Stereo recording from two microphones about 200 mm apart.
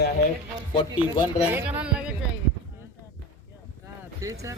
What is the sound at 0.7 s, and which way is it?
Speech, 20° left (ahead or behind).